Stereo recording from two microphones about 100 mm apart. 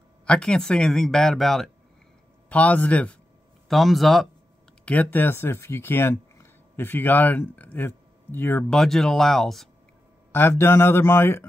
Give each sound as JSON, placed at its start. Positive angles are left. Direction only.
{"t": 0.2, "sound": "speech", "side_deg": 10}
{"t": 2.5, "sound": "a man's voice", "side_deg": 15}
{"t": 3.6, "sound": "speech", "side_deg": 0}
{"t": 4.8, "sound": "speech", "side_deg": 15}
{"t": 8.6, "sound": "speech", "side_deg": 5}
{"t": 10.3, "sound": "a man's voice", "side_deg": 25}